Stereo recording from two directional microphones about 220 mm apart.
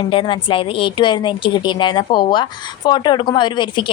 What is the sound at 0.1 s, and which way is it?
A woman's voice, 25° left (ahead or behind).